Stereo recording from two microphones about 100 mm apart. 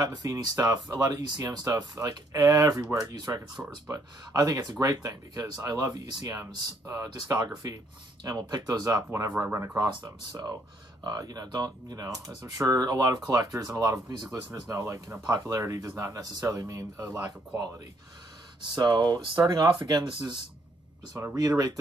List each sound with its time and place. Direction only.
0.0 s speech: 45° right (ahead or behind)
3.6 s speech: 20° right (ahead or behind)
3.9 s speech: 35° right (ahead or behind)
9.4 s speech: 25° right (ahead or behind)
9.8 s speech: 40° right (ahead or behind)
15.2 s speech: 40° right (ahead or behind)
18.6 s speech: 50° right (ahead or behind)
21.4 s speech: 40° right (ahead or behind)